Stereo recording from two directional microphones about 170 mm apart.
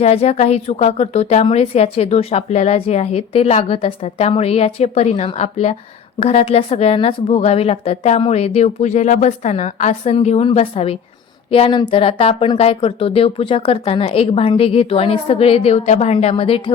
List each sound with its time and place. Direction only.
0.0 s a woman's voice: 40° left (ahead or behind)